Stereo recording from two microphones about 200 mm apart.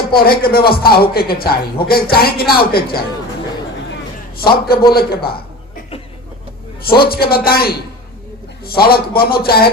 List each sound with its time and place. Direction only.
0.2 s a man's voice: 50° left (ahead or behind)
4.9 s a man's voice: 50° left (ahead or behind)
6.8 s a man's voice: 50° left (ahead or behind)